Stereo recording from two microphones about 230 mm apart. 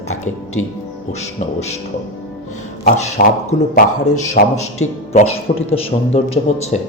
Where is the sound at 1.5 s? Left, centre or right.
Left.